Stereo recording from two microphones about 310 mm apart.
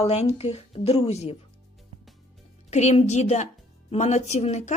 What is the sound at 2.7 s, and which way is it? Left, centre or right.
Speech, left.